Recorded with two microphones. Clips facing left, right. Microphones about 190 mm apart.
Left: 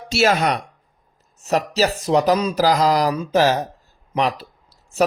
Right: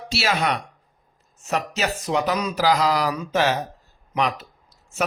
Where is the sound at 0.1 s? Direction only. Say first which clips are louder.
Left 6 dB; 45° left (ahead or behind).